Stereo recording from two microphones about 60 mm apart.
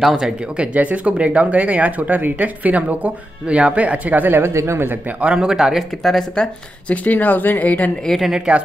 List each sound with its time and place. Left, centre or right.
0.0 s speech: centre
0.7 s speech: right
4.4 s speech: right
5.2 s speech: centre
6.0 s speech: centre
7.1 s speech: left
8.2 s speech: centre